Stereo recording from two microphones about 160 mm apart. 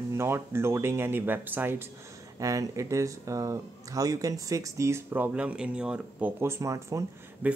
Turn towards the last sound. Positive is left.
turn(degrees=-10)  # may be behind; listen again after turning